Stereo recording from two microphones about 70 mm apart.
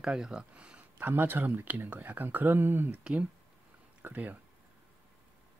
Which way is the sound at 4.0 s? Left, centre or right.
Right.